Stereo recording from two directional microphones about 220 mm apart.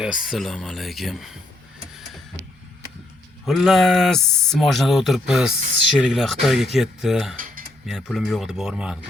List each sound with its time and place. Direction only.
0.0 s speech: 5° right (ahead or behind)
3.4 s speech: centre (ahead or behind)
7.3 s cutlery: 40° right (ahead or behind)
7.9 s speech: centre (ahead or behind)